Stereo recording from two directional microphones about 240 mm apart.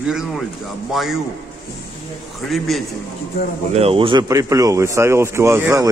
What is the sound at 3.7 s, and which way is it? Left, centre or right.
Speech, right.